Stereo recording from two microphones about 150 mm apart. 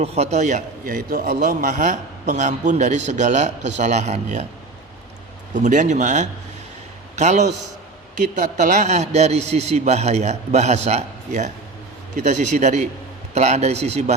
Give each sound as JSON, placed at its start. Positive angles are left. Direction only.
{"t": 0.0, "sound": "a man's voice", "side_deg": -45}
{"t": 5.5, "sound": "a man's voice", "side_deg": -55}